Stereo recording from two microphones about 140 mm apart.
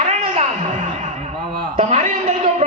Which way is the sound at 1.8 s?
50° right (ahead or behind).